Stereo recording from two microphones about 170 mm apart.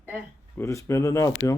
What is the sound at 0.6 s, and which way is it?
Speech, 15° left (ahead or behind).